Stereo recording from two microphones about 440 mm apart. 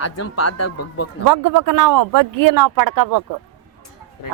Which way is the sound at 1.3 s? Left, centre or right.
Right.